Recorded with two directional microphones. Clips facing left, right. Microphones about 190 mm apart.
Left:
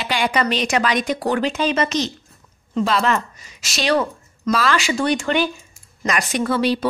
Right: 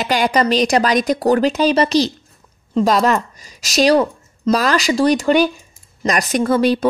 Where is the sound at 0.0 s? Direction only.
40° right (ahead or behind).